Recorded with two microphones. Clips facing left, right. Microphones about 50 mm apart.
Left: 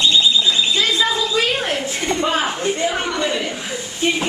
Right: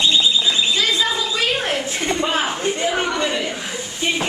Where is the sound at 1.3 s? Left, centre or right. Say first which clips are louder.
Left 1 dB; centre.